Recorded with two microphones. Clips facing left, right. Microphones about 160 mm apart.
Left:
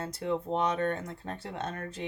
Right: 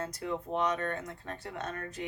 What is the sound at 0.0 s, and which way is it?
Speech, 30° left (ahead or behind).